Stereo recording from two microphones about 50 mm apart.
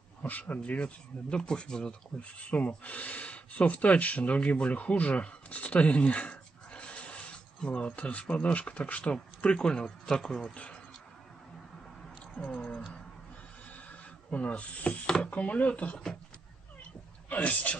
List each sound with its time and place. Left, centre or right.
0.2 s speech: left
2.1 s speech: left
12.4 s speech: left
14.3 s speech: left
17.3 s a man's voice: left